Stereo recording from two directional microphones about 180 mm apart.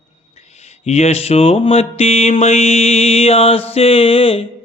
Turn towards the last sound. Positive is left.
turn(degrees=30)  # may be behind; listen again after turning